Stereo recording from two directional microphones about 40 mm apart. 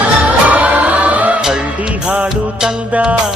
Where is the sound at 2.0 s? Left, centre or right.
Right.